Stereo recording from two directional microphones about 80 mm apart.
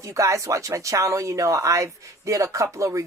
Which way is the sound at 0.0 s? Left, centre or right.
Right.